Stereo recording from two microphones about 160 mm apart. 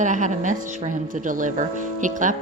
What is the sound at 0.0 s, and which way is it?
A woman's voice, 50° right (ahead or behind).